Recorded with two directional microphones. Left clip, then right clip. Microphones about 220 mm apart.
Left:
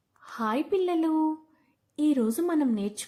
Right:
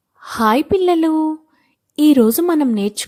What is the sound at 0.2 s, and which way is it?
A woman's voice, 45° right (ahead or behind).